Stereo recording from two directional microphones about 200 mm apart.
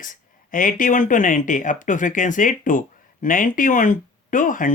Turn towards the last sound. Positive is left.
turn(degrees=40)  # may be behind; listen again after turning